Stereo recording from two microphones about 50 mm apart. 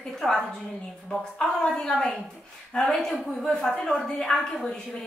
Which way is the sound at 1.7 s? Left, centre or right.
Centre.